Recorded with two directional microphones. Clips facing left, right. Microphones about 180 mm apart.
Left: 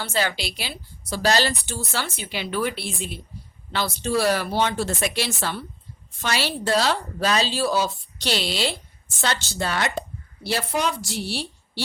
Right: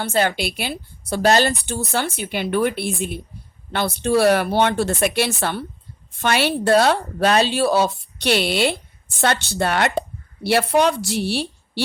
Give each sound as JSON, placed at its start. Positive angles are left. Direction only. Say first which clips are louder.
{"t": 0.0, "sound": "a woman's voice", "louder": "right 5 dB", "side_deg": -55}